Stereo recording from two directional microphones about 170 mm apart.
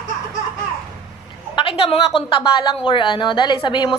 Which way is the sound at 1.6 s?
30° left (ahead or behind).